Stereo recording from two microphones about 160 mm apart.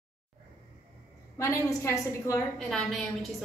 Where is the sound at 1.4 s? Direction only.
20° left (ahead or behind).